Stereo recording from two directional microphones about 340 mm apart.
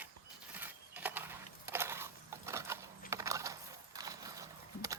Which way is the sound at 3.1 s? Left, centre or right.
Centre.